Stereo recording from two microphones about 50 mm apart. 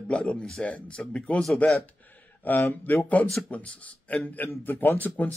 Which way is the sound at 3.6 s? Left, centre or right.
Left.